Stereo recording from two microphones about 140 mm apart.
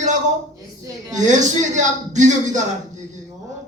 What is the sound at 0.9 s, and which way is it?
Speech, 25° right (ahead or behind).